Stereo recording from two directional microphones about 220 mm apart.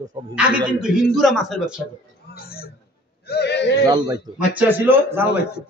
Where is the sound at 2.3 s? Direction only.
45° left (ahead or behind).